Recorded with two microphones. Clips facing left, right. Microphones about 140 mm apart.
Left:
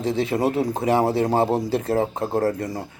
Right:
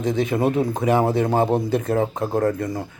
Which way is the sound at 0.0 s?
30° left (ahead or behind).